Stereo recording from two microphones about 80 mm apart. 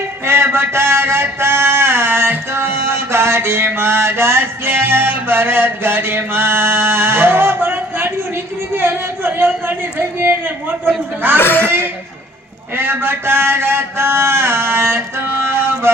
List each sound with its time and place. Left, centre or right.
0.3 s mantra: right
8.7 s speech: right
11.3 s speech: left
12.7 s mantra: right